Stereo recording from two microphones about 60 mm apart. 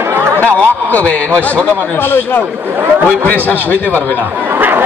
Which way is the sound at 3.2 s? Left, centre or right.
Left.